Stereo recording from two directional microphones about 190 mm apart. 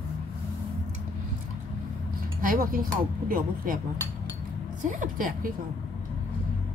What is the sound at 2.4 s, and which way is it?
A woman's voice, 45° right (ahead or behind).